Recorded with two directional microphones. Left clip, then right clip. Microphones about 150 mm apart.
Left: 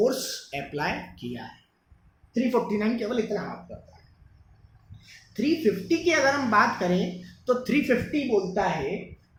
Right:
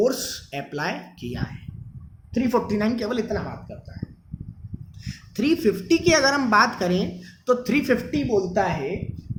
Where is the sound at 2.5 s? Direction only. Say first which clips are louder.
Right 3 dB; 50° right (ahead or behind).